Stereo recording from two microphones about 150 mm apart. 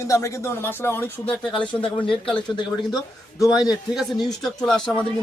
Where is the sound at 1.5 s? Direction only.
35° left (ahead or behind).